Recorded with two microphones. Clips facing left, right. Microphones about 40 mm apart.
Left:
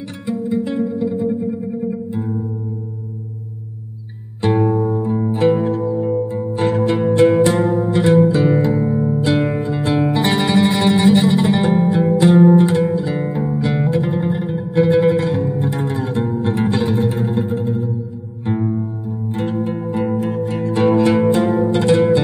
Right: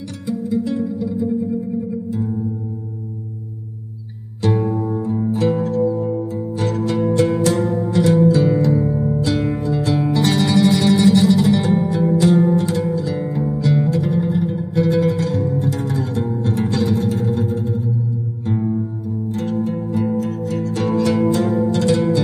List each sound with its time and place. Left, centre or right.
0.3 s music: left
4.4 s music: left